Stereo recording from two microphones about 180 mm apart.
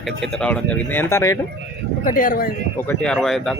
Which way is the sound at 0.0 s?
5° left (ahead or behind).